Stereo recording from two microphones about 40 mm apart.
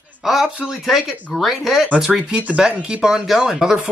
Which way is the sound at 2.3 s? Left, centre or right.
Right.